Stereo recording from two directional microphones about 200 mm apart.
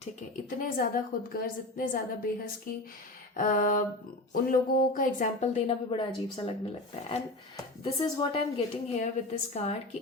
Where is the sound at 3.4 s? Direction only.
40° left (ahead or behind); by 6.5 s 25° left (ahead or behind).